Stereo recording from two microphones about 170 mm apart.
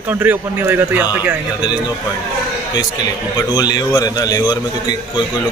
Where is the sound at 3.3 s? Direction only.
25° left (ahead or behind).